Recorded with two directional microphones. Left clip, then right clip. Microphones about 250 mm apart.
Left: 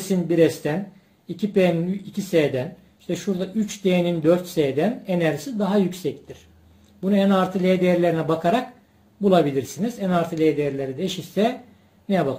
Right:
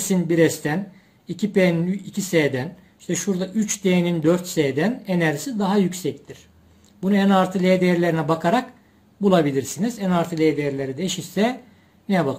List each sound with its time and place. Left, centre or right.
0.1 s speech: right